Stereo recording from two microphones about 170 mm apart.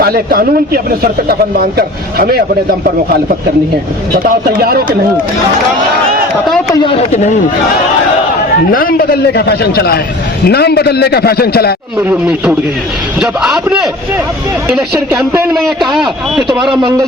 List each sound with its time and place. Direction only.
0.0 s speech: 65° right (ahead or behind)
4.1 s speech: 60° right (ahead or behind)
6.7 s speech: 35° left (ahead or behind)
8.7 s a man's voice: 60° left (ahead or behind)
11.9 s a man's voice: 10° right (ahead or behind)
14.9 s speech: 15° right (ahead or behind)
15.5 s a man's voice: centre (ahead or behind)